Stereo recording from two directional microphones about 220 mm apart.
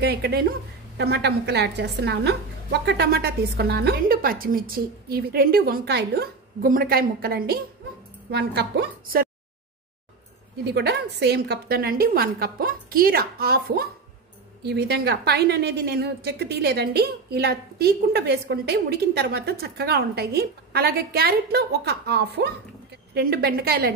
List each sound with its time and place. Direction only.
0.0 s a woman's voice: 45° right (ahead or behind)
10.6 s a woman's voice: 50° right (ahead or behind)